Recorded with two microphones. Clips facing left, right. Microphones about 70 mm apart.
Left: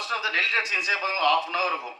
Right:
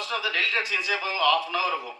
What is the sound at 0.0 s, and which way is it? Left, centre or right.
A man's voice, left.